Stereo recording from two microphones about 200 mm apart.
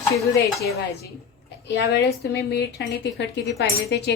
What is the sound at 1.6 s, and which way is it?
A woman's voice, 60° left (ahead or behind).